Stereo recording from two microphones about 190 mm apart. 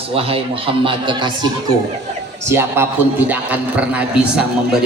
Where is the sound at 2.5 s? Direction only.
10° right (ahead or behind).